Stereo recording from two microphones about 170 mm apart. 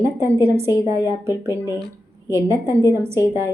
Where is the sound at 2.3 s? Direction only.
15° right (ahead or behind).